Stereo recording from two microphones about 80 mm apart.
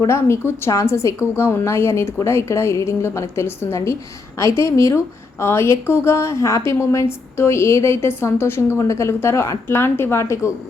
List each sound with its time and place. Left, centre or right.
0.1 s a woman's voice: left